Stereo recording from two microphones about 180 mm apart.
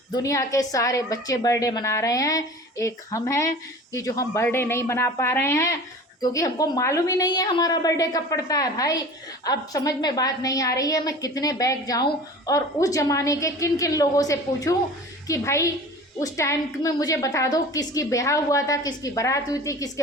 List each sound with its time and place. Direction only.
0.1 s a woman's voice: 15° left (ahead or behind)